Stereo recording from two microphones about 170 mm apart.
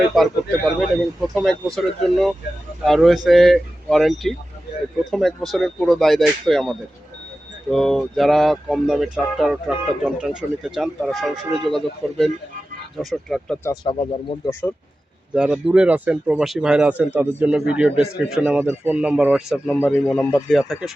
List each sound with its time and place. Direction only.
0.1 s speech: centre (ahead or behind)
13.8 s speech: 30° left (ahead or behind)
15.4 s speech: 5° right (ahead or behind)
19.6 s speech: 10° left (ahead or behind)